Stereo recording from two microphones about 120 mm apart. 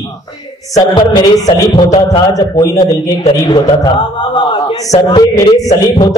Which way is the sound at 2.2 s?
30° left (ahead or behind).